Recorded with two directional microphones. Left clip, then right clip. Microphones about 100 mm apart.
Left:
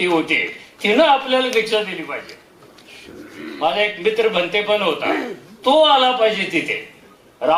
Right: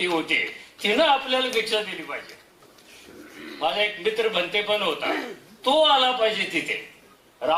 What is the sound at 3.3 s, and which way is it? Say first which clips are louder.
A man's voice: left 6 dB; 10° left (ahead or behind).